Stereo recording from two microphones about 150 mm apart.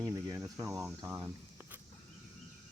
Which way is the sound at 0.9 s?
20° right (ahead or behind).